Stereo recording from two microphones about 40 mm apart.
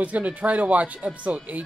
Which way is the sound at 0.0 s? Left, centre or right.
Right.